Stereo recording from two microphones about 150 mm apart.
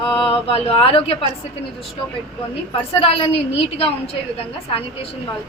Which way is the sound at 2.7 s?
40° left (ahead or behind).